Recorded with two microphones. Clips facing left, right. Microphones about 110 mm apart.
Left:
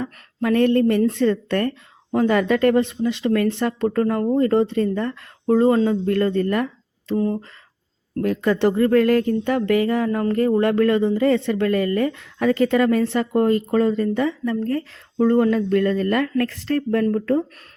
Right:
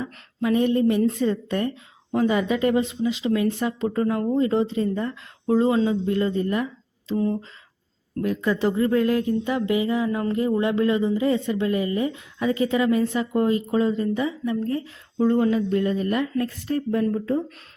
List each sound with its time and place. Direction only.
0.0 s speech: 60° left (ahead or behind)
8.2 s speech: 70° left (ahead or behind)